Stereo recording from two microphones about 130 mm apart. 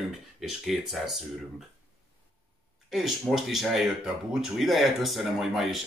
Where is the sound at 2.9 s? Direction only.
Centre (ahead or behind).